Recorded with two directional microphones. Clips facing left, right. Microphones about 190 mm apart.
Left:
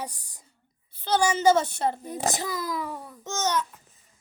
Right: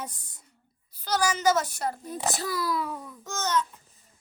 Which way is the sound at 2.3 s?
20° left (ahead or behind).